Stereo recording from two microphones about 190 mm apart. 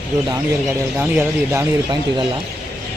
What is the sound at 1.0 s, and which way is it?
Speech, 10° right (ahead or behind).